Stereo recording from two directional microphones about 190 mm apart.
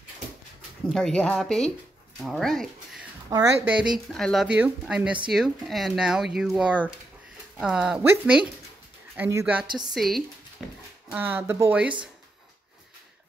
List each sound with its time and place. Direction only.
0.8 s speech: centre (ahead or behind)
3.3 s speech: 15° right (ahead or behind)
3.7 s speech: 5° right (ahead or behind)
9.7 s a woman's voice: 20° right (ahead or behind)
9.9 s speech: centre (ahead or behind)